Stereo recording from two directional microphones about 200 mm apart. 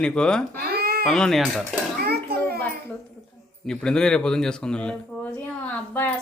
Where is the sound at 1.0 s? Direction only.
Centre (ahead or behind).